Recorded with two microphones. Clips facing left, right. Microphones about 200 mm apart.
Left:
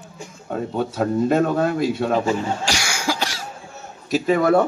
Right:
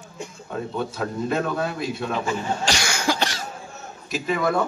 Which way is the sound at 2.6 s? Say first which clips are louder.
Even; 10° left (ahead or behind).